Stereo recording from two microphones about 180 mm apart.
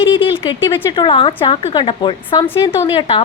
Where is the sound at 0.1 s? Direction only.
30° left (ahead or behind).